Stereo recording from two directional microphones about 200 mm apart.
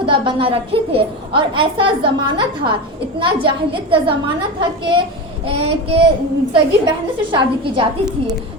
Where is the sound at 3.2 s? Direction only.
25° right (ahead or behind).